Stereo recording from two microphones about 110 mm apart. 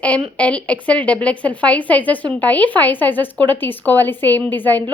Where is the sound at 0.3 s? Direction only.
10° left (ahead or behind).